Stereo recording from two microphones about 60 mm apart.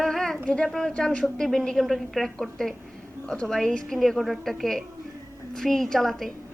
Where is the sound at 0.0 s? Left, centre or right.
Centre.